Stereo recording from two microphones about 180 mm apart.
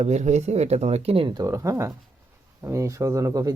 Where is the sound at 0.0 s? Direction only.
40° right (ahead or behind).